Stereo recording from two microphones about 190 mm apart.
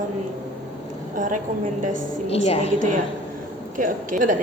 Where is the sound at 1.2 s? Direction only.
45° right (ahead or behind).